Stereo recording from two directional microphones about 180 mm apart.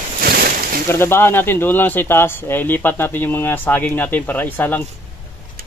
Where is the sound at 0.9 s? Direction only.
15° left (ahead or behind).